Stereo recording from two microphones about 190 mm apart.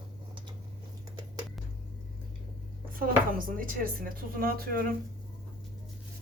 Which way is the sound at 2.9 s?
50° right (ahead or behind).